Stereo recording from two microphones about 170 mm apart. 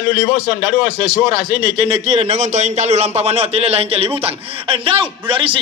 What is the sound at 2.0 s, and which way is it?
A man's voice, 40° right (ahead or behind).